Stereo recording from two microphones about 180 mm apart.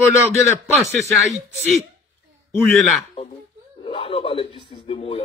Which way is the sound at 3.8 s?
30° left (ahead or behind).